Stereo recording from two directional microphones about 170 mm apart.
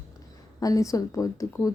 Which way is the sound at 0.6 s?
20° left (ahead or behind).